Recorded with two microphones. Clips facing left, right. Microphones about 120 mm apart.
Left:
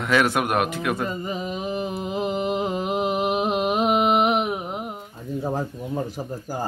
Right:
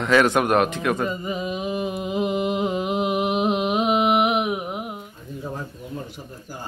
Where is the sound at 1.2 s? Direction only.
30° left (ahead or behind).